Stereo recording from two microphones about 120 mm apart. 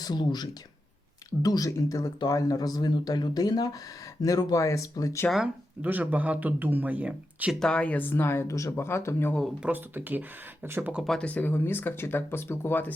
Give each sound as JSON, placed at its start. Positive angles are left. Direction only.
{"t": 0.0, "sound": "speech", "side_deg": 35}
{"t": 5.8, "sound": "speech", "side_deg": -15}
{"t": 7.6, "sound": "speech", "side_deg": 10}
{"t": 9.6, "sound": "speech", "side_deg": -15}
{"t": 11.0, "sound": "speech", "side_deg": 0}
{"t": 11.3, "sound": "speech", "side_deg": 15}